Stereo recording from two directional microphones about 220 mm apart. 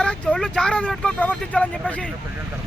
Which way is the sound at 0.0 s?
5° left (ahead or behind).